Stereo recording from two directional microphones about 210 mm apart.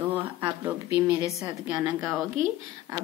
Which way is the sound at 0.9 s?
10° right (ahead or behind).